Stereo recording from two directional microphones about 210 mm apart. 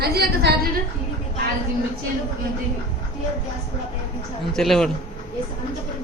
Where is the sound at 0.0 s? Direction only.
50° right (ahead or behind).